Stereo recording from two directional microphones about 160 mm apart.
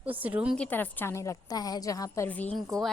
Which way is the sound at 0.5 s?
10° left (ahead or behind).